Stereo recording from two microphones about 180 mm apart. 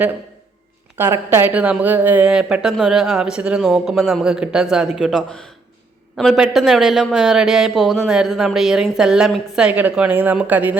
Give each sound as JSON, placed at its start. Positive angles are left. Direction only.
{"t": 0.9, "sound": "speech", "side_deg": -10}